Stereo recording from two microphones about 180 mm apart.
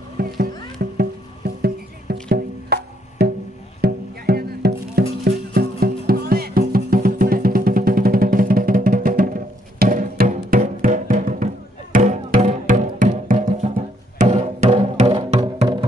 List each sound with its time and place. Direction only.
0.2 s music: 60° right (ahead or behind); by 15.8 s 25° right (ahead or behind)